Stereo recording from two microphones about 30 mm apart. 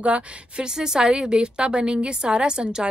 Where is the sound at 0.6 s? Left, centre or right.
Right.